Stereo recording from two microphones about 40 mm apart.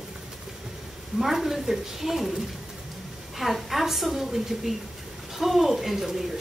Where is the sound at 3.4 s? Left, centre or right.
Centre.